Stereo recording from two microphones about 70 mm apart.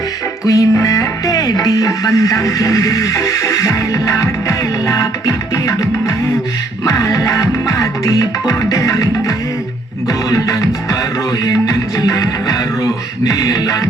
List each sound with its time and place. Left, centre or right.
0.4 s speech: left
6.8 s music: left
11.4 s speech: left